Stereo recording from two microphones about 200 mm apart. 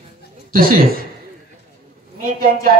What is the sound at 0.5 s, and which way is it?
Speech, 45° right (ahead or behind).